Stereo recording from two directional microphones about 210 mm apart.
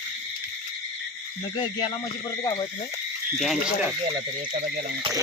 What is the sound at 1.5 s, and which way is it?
Speech, 25° left (ahead or behind).